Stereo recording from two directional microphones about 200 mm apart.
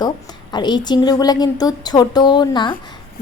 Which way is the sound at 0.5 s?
20° left (ahead or behind).